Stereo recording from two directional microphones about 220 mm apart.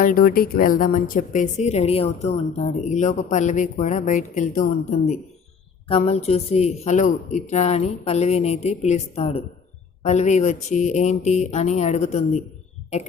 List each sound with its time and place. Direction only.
0.0 s a woman's voice: 40° left (ahead or behind)